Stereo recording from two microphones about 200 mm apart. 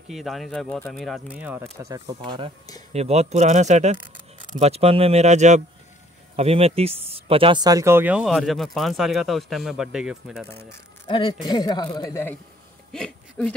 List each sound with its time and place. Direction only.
0.1 s speech: centre (ahead or behind)
11.1 s a man's voice: 25° left (ahead or behind); by 13.6 s 5° left (ahead or behind)